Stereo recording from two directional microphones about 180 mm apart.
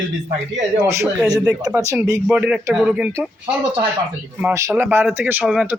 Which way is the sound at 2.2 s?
5° right (ahead or behind).